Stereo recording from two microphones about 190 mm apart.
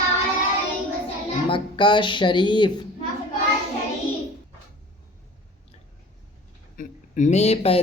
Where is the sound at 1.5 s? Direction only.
25° left (ahead or behind).